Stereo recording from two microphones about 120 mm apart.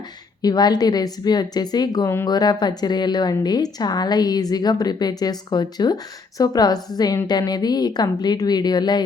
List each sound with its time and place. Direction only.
0.4 s a woman's voice: 35° left (ahead or behind)